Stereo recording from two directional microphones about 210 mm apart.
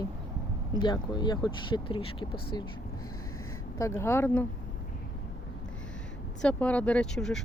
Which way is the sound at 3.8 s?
15° left (ahead or behind).